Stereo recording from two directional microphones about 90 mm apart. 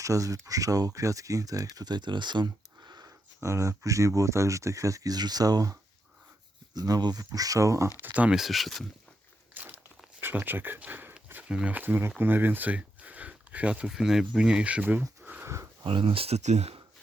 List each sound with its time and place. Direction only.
0.0 s speech: 40° right (ahead or behind)
3.4 s speech: 35° right (ahead or behind)
6.7 s speech: 45° right (ahead or behind)
8.0 s speech: 15° right (ahead or behind)
8.4 s speech: centre (ahead or behind)
9.6 s a sound: 20° right (ahead or behind)
10.2 s speech: 25° right (ahead or behind)
15.2 s sniff: 15° right (ahead or behind)
15.4 s a sound: 30° right (ahead or behind)
15.8 s speech: 75° right (ahead or behind)